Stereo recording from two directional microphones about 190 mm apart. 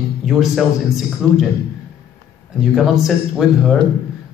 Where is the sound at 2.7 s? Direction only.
Centre (ahead or behind).